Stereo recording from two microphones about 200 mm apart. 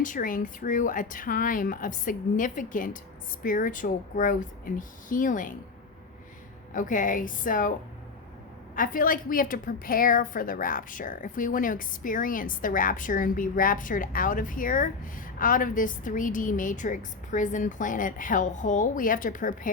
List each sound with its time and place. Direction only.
0.0 s speech: 40° left (ahead or behind)
6.7 s speech: 40° left (ahead or behind)
8.7 s a woman's voice: 45° left (ahead or behind)